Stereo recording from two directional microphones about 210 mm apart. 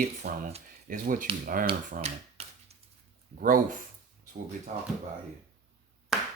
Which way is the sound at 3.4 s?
40° right (ahead or behind).